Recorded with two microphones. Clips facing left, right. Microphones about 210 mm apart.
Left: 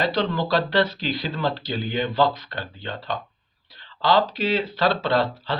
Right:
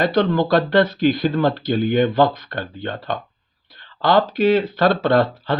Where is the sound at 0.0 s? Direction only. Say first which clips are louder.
Right 6 dB; 50° right (ahead or behind).